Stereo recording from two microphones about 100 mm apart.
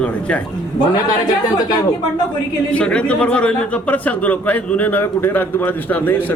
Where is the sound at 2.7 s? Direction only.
10° left (ahead or behind).